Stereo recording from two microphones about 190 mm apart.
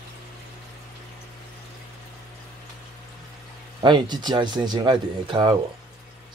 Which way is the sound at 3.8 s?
25° right (ahead or behind).